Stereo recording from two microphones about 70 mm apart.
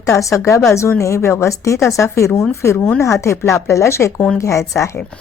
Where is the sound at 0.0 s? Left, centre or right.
Left.